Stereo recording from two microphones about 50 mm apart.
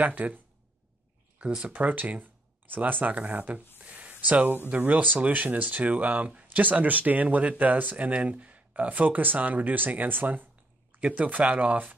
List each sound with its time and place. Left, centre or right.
0.0 s speech: right
1.4 s speech: right
1.7 s speech: right
3.7 s a sound: right
4.6 s speech: right